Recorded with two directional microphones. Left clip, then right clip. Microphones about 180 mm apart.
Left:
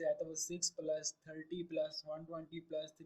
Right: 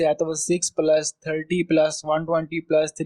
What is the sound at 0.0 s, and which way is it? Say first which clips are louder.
Speech: right 17 dB; 45° right (ahead or behind).